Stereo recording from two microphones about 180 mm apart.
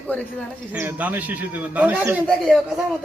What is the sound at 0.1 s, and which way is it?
Speech, 10° left (ahead or behind).